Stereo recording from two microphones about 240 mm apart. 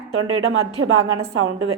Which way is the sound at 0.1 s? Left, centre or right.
Right.